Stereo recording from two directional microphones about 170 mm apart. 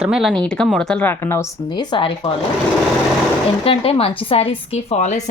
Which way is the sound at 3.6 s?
35° left (ahead or behind).